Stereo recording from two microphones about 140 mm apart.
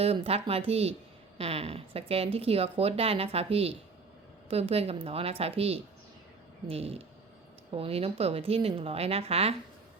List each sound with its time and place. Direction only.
0.0 s speech: 45° right (ahead or behind)